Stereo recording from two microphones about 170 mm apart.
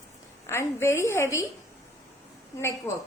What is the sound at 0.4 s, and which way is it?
A woman's voice, 15° left (ahead or behind).